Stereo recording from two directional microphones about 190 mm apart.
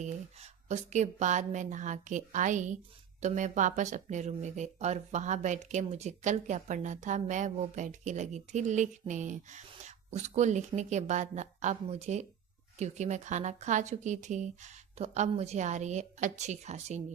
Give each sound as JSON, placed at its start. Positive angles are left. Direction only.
{"t": 0.0, "sound": "speech", "side_deg": -35}